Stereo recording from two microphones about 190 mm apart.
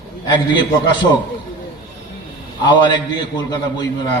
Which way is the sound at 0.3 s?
25° left (ahead or behind).